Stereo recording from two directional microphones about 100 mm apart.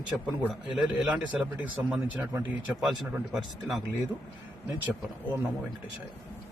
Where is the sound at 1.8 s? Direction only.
25° right (ahead or behind).